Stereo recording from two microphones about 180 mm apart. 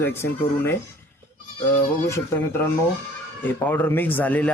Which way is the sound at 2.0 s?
15° left (ahead or behind).